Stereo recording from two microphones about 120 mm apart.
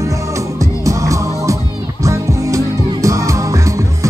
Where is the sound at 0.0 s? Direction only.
25° right (ahead or behind).